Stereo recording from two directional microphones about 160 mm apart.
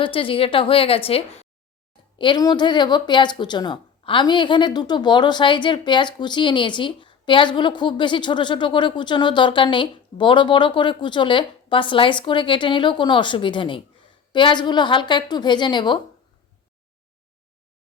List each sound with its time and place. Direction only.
0.0 s a woman's voice: 35° left (ahead or behind)